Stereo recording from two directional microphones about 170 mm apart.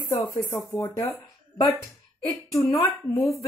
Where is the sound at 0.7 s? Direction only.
25° left (ahead or behind).